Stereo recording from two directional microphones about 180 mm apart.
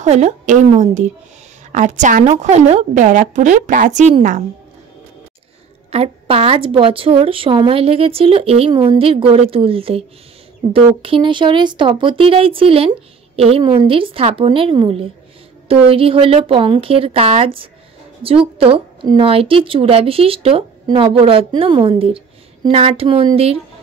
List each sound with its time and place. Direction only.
0.0 s a woman's voice: 40° right (ahead or behind)
5.9 s a woman's voice: 35° right (ahead or behind)